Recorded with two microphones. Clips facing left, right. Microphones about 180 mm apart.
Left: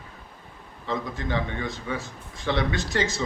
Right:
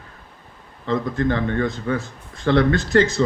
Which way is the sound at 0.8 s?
55° right (ahead or behind).